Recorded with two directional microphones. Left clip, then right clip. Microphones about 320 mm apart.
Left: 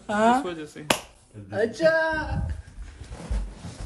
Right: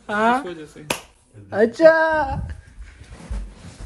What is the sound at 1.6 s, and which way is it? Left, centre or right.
Speech, centre.